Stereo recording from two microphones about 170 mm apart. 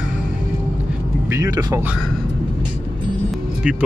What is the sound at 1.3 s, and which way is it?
Speech, 20° right (ahead or behind).